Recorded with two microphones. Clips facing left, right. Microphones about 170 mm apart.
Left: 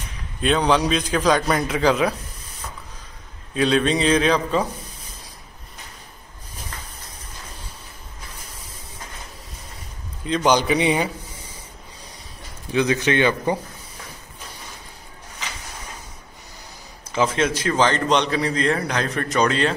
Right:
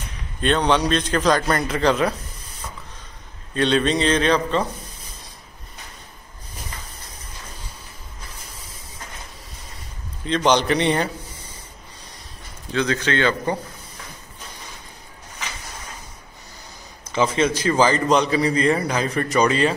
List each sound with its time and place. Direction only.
0.4 s a man's voice: 5° left (ahead or behind)
3.5 s a man's voice: centre (ahead or behind)
10.2 s a man's voice: 5° left (ahead or behind)
12.7 s speech: 15° left (ahead or behind)
17.1 s a man's voice: centre (ahead or behind)